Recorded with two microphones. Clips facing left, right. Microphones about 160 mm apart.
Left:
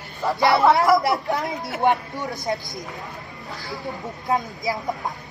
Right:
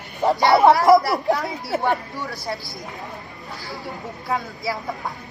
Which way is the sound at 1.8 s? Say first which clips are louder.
Left 6 dB; 20° left (ahead or behind).